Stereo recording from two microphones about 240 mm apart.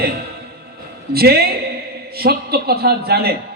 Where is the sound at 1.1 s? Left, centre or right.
Right.